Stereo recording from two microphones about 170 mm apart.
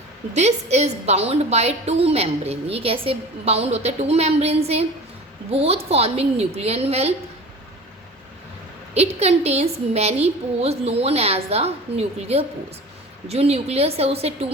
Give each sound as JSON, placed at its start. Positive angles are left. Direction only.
{"t": 0.3, "sound": "a woman's voice", "side_deg": -40}
{"t": 9.0, "sound": "a woman's voice", "side_deg": -40}